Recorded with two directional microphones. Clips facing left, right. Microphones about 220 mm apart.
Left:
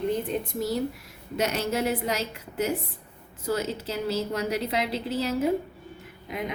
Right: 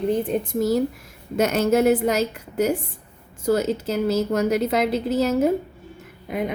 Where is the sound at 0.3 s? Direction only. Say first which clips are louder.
Right 7 dB; 45° right (ahead or behind).